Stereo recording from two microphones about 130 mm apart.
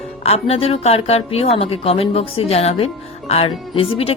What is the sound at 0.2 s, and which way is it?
A woman's voice, 50° left (ahead or behind).